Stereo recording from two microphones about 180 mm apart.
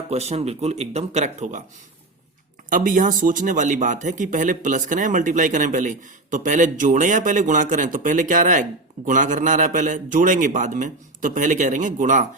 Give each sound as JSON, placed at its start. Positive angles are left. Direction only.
{"t": 0.1, "sound": "speech", "side_deg": -35}
{"t": 2.6, "sound": "speech", "side_deg": -45}